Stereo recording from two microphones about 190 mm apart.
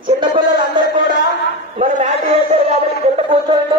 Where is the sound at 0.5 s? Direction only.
25° right (ahead or behind).